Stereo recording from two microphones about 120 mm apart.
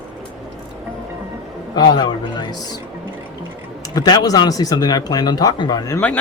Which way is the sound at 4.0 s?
35° left (ahead or behind).